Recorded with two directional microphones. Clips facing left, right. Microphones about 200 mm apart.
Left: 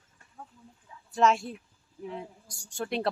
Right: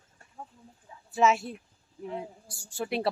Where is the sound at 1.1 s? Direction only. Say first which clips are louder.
Even; 5° right (ahead or behind).